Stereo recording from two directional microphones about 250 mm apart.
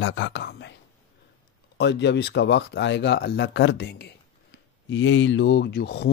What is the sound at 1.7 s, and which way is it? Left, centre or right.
Speech, left.